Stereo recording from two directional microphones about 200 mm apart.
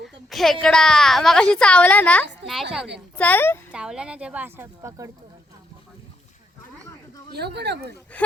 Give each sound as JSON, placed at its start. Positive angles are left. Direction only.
{"t": 0.3, "sound": "a woman's voice", "side_deg": 0}
{"t": 2.4, "sound": "speech", "side_deg": -60}
{"t": 3.2, "sound": "a woman's voice", "side_deg": 10}
{"t": 3.7, "sound": "speech", "side_deg": -5}
{"t": 7.3, "sound": "speech", "side_deg": -55}